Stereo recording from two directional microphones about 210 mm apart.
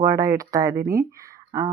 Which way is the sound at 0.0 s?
15° right (ahead or behind).